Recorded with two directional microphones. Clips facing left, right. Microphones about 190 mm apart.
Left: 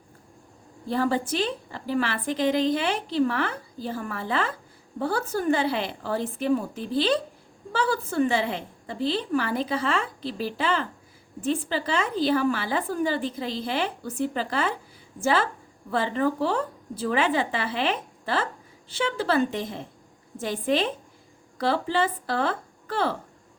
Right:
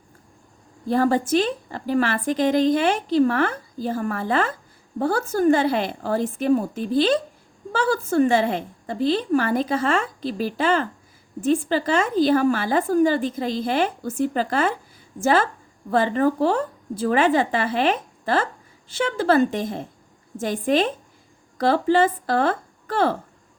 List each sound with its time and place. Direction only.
0.9 s a woman's voice: 45° right (ahead or behind)